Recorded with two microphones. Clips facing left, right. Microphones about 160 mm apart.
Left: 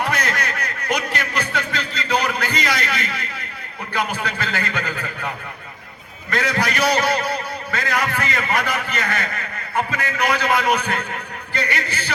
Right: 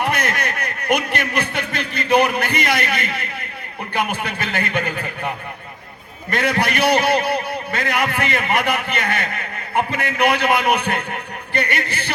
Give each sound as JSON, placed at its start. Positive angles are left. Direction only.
{"t": 0.1, "sound": "a sound", "side_deg": -55}
{"t": 4.1, "sound": "a man's voice", "side_deg": -55}
{"t": 6.4, "sound": "a man's voice", "side_deg": -60}